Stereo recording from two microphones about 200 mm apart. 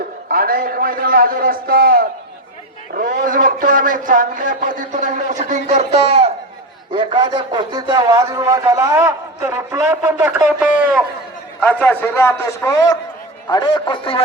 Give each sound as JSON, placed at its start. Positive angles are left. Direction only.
{"t": 0.3, "sound": "a man's voice", "side_deg": -45}
{"t": 11.6, "sound": "a man's voice", "side_deg": 5}